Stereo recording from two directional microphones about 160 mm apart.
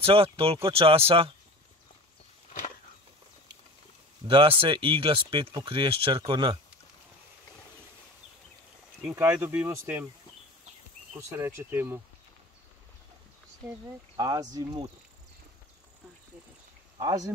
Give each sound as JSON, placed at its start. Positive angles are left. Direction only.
{"t": 0.0, "sound": "speech", "side_deg": -35}
{"t": 4.3, "sound": "speech", "side_deg": -35}
{"t": 9.0, "sound": "speech", "side_deg": -15}
{"t": 11.1, "sound": "speech", "side_deg": -15}
{"t": 13.7, "sound": "speech", "side_deg": -20}
{"t": 17.0, "sound": "speech", "side_deg": -20}